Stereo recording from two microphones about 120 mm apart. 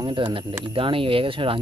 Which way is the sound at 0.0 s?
40° right (ahead or behind).